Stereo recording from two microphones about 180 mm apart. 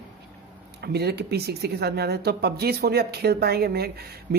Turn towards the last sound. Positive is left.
turn(degrees=-60)  # may be behind; listen again after turning